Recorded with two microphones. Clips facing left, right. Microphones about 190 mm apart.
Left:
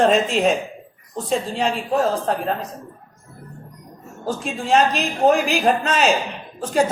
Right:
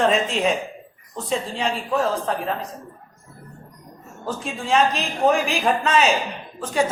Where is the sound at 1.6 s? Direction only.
40° left (ahead or behind).